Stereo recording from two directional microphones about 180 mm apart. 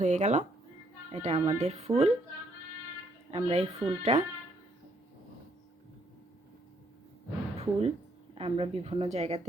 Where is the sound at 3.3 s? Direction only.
35° right (ahead or behind).